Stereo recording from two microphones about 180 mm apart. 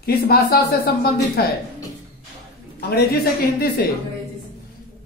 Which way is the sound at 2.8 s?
60° left (ahead or behind).